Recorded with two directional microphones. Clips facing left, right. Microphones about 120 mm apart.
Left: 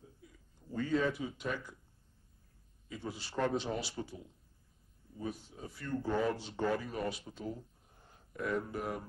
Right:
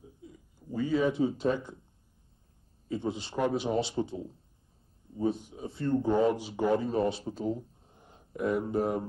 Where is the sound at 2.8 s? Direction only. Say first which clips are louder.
Right 10 dB; 25° right (ahead or behind).